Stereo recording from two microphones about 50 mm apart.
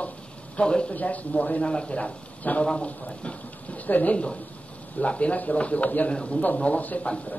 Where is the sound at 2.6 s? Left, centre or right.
Centre.